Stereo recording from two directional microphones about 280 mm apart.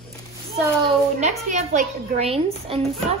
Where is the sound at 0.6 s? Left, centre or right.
Right.